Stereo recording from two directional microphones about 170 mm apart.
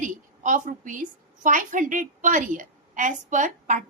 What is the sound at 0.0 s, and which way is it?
A woman's voice, 50° right (ahead or behind).